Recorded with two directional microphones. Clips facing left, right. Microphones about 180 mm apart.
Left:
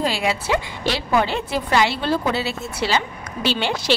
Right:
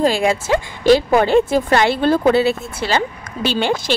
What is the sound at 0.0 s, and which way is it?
A woman's voice, 50° right (ahead or behind).